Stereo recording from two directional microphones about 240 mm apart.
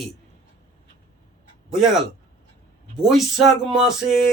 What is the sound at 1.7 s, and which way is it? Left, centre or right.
Speech, centre.